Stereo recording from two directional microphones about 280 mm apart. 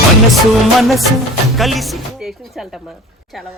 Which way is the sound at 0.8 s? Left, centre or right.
Centre.